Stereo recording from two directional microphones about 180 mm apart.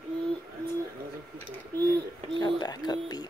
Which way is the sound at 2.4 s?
20° left (ahead or behind).